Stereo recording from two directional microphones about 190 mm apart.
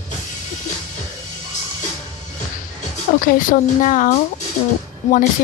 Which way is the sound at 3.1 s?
45° left (ahead or behind).